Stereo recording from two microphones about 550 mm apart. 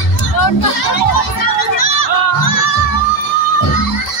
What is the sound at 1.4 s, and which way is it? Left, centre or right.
Music, left.